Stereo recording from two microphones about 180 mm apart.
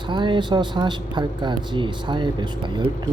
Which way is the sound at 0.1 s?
25° right (ahead or behind).